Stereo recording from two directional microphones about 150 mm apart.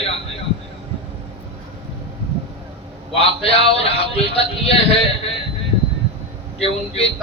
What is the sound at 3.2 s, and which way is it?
Speech, 40° left (ahead or behind).